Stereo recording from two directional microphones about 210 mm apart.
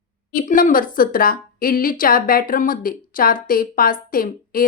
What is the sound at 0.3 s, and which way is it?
A woman's voice, 40° left (ahead or behind).